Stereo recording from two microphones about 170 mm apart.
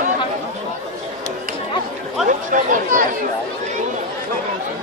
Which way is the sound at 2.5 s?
50° right (ahead or behind).